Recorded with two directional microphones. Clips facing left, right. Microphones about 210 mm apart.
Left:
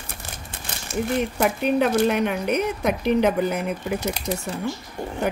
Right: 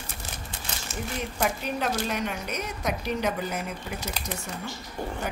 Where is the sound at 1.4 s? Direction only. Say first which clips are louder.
Left 7 dB; 60° left (ahead or behind).